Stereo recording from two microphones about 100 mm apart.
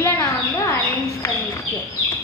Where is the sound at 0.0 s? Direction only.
30° left (ahead or behind).